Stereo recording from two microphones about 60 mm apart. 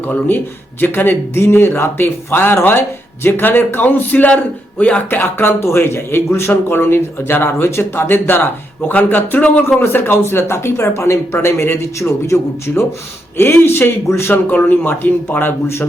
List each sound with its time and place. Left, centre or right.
0.0 s a man's voice: left
9.4 s speech: centre
9.8 s a man's voice: left
14.5 s a man's voice: left